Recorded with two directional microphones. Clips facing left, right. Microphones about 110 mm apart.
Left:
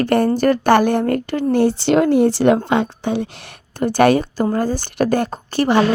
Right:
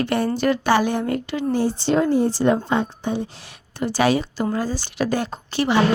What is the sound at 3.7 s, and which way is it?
A woman's voice, 55° left (ahead or behind).